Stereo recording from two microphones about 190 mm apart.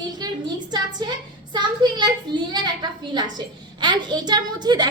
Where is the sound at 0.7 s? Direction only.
20° right (ahead or behind).